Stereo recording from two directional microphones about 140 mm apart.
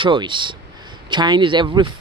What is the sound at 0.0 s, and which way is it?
Speech, 35° right (ahead or behind).